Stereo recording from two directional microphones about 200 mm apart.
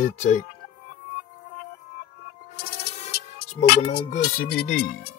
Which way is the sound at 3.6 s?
50° left (ahead or behind).